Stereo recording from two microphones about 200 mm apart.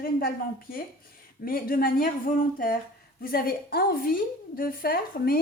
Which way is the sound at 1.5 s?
45° left (ahead or behind).